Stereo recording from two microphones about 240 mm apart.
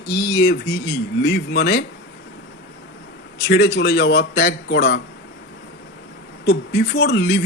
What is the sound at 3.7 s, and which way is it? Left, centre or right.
A man's voice, left.